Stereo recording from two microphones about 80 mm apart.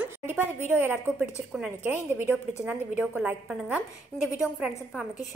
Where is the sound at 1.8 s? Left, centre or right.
Right.